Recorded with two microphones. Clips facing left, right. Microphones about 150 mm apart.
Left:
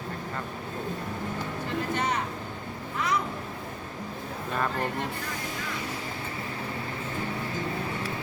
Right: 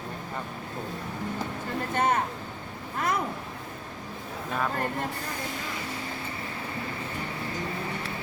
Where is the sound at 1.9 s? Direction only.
50° right (ahead or behind).